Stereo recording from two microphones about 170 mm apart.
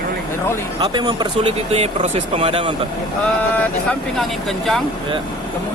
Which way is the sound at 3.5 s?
5° left (ahead or behind).